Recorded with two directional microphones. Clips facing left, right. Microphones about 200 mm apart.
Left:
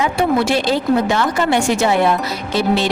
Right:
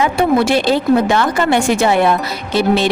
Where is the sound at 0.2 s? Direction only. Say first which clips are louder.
Right 3 dB; 60° right (ahead or behind).